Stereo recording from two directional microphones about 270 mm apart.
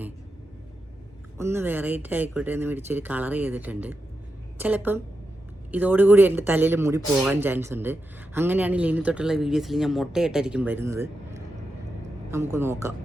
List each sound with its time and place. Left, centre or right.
1.4 s a woman's voice: centre